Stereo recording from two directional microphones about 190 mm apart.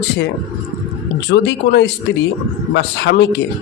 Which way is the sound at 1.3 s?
65° left (ahead or behind).